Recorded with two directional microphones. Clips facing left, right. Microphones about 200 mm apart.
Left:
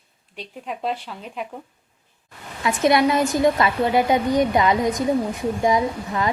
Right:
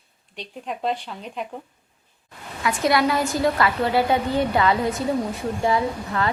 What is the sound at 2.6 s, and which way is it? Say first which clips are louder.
A woman's voice: left 3 dB; 20° left (ahead or behind).